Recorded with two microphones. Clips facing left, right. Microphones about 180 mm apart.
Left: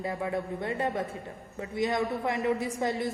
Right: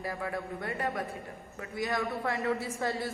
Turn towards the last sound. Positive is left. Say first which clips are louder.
# left 3 dB
turn(degrees=20)  # may be behind; listen again after turning